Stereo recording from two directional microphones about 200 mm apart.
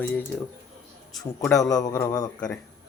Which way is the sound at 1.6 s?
15° left (ahead or behind).